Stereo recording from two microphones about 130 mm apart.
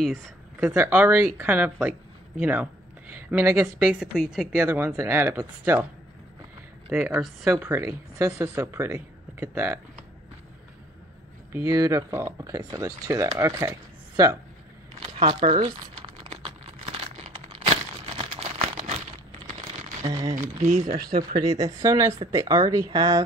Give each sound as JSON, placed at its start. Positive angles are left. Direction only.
{"t": 0.0, "sound": "speech", "side_deg": 0}
{"t": 0.7, "sound": "speech", "side_deg": -20}
{"t": 4.2, "sound": "speech", "side_deg": 0}
{"t": 4.6, "sound": "speech", "side_deg": -20}
{"t": 6.9, "sound": "speech", "side_deg": -10}
{"t": 11.5, "sound": "speech", "side_deg": -25}
{"t": 15.2, "sound": "speech", "side_deg": -40}
{"t": 15.9, "sound": "crumpling", "side_deg": -40}
{"t": 20.2, "sound": "speech", "side_deg": -30}
{"t": 20.6, "sound": "speech", "side_deg": -65}
{"t": 21.2, "sound": "speech", "side_deg": -30}